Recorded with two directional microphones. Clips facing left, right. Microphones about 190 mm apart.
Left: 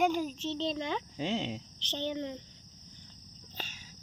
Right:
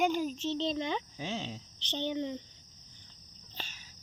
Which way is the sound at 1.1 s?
25° left (ahead or behind).